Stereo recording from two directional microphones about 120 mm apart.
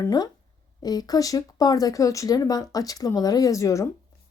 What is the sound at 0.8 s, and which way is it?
A woman's voice, 35° left (ahead or behind).